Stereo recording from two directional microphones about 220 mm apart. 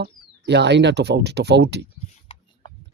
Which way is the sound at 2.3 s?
25° left (ahead or behind).